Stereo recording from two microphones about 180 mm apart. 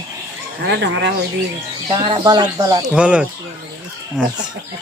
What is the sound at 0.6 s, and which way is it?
Speech, 65° right (ahead or behind).